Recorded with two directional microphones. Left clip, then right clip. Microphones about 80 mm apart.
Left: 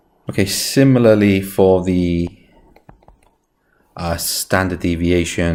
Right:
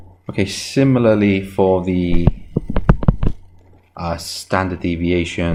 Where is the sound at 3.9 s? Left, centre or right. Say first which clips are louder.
Left 2 dB; left.